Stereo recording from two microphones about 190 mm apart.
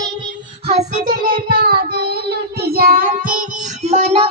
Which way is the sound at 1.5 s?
50° right (ahead or behind).